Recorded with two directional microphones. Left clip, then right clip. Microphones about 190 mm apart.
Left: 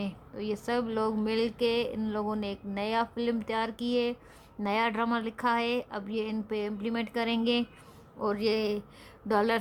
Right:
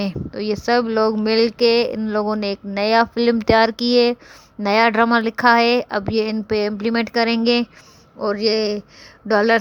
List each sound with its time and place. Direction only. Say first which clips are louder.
0.0 s speech: right 12 dB; 35° right (ahead or behind)